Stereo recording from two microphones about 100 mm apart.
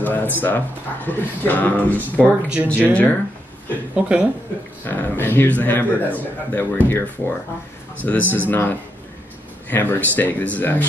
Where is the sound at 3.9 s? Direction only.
10° right (ahead or behind).